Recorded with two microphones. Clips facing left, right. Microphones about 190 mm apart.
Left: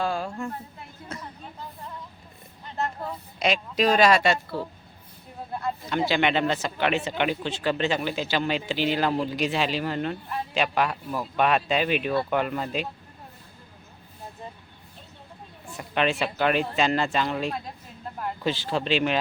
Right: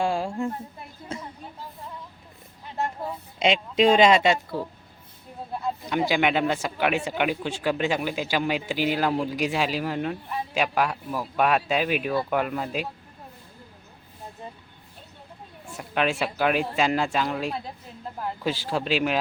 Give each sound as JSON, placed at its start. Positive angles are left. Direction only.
{"t": 0.0, "sound": "a woman's voice", "side_deg": -25}
{"t": 2.7, "sound": "speech", "side_deg": -10}
{"t": 3.3, "sound": "a woman's voice", "side_deg": -25}
{"t": 5.5, "sound": "speech", "side_deg": -5}
{"t": 15.6, "sound": "speech", "side_deg": -5}